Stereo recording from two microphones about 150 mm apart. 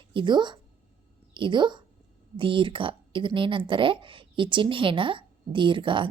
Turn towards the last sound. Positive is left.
turn(degrees=-35)  # may be behind; listen again after turning